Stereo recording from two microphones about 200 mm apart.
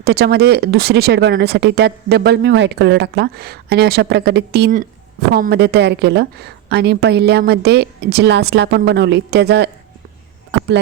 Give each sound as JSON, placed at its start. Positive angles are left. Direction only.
{"t": 0.0, "sound": "a woman's voice", "side_deg": -55}